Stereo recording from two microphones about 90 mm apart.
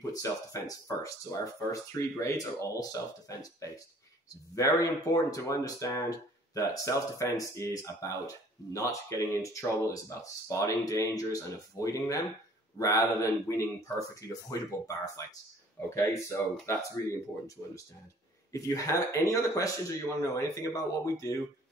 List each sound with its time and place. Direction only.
0.1 s speech: 40° left (ahead or behind)